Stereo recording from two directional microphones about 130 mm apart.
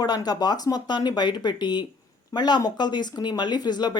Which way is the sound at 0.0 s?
30° left (ahead or behind).